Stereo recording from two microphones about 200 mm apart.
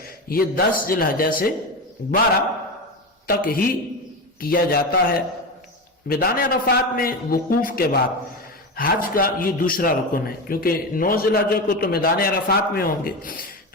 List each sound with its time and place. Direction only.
0.0 s a man's voice: 45° left (ahead or behind)
3.2 s a man's voice: 45° left (ahead or behind)